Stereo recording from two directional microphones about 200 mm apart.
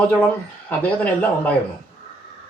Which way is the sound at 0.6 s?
5° left (ahead or behind).